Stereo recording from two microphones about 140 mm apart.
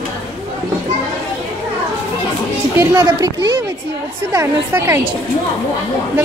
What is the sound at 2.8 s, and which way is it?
A woman's voice, 25° right (ahead or behind).